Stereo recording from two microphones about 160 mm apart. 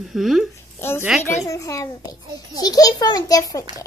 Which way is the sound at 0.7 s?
15° left (ahead or behind).